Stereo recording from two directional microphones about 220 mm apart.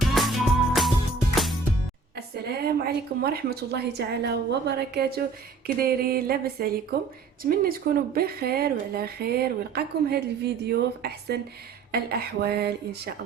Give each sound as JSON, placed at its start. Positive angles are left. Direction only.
{"t": 0.0, "sound": "music", "side_deg": 0}
{"t": 2.1, "sound": "a woman's voice", "side_deg": -45}